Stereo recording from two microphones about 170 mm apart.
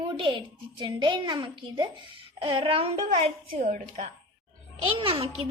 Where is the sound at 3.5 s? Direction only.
50° right (ahead or behind).